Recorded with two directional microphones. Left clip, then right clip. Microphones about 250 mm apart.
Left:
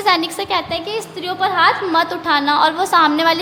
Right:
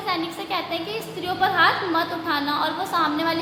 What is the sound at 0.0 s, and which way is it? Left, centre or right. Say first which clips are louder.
A woman's voice: left 10 dB; left.